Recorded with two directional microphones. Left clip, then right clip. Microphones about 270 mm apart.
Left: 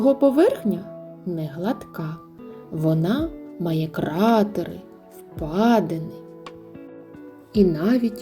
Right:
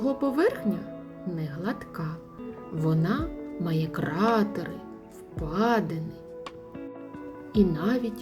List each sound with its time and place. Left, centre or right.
0.0 s speech: centre
7.5 s speech: centre